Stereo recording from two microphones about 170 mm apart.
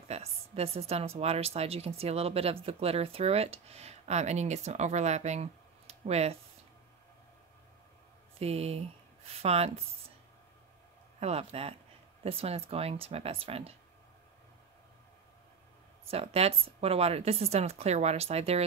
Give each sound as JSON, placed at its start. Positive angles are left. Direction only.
{"t": 0.1, "sound": "a woman's voice", "side_deg": -35}
{"t": 8.4, "sound": "a woman's voice", "side_deg": -35}
{"t": 11.1, "sound": "a woman's voice", "side_deg": -40}
{"t": 16.1, "sound": "a woman's voice", "side_deg": -35}